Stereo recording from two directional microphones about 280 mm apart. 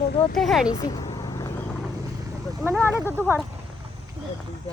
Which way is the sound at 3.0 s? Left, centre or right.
Centre.